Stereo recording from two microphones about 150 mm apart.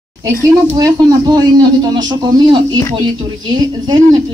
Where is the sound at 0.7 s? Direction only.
25° right (ahead or behind).